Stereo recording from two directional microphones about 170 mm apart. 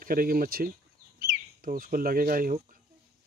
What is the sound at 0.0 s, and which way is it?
A child's voice, 55° right (ahead or behind).